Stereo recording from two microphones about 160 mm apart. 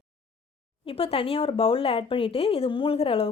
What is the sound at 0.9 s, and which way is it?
Speech, 35° left (ahead or behind).